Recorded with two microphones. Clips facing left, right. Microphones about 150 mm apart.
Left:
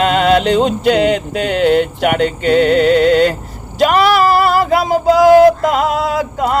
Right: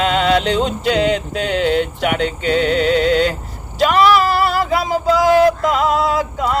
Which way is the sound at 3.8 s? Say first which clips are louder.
Left 2 dB; 50° left (ahead or behind).